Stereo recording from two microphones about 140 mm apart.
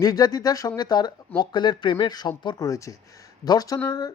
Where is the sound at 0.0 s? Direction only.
25° left (ahead or behind).